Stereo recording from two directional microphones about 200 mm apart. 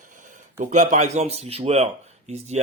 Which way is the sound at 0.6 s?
35° right (ahead or behind).